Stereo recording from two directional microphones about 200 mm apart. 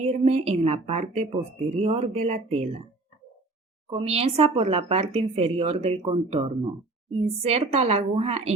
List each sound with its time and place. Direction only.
0.0 s speech: 30° right (ahead or behind)
3.8 s speech: 30° right (ahead or behind)